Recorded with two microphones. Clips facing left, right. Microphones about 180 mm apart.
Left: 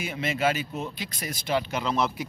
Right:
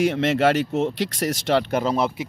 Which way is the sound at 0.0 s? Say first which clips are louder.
Right 8 dB; 80° right.